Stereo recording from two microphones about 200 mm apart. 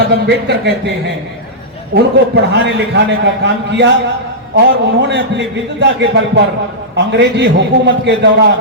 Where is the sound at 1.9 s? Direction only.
60° right (ahead or behind).